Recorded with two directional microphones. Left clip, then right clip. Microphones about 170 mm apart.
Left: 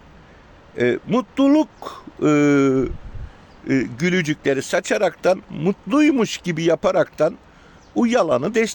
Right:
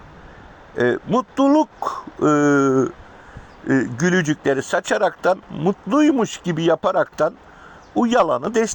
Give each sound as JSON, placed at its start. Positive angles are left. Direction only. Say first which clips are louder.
{"t": 1.2, "sound": "speech", "louder": "right 1 dB", "side_deg": 10}
{"t": 4.0, "sound": "speech", "louder": "right 1 dB", "side_deg": 20}
{"t": 5.5, "sound": "speech", "louder": "right 1 dB", "side_deg": 25}